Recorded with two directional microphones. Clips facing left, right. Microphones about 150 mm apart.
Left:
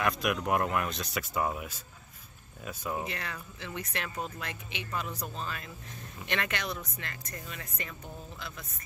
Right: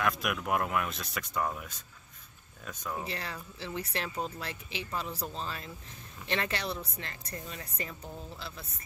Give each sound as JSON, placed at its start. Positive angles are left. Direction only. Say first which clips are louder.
{"t": 0.0, "sound": "speech", "louder": "left 2 dB", "side_deg": 0}
{"t": 3.1, "sound": "speech", "louder": "even", "side_deg": -30}